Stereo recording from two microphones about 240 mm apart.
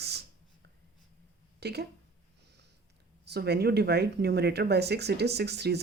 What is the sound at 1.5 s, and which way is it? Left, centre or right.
Speech, right.